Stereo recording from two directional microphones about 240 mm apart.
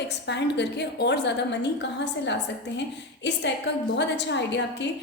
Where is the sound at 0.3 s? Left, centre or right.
Left.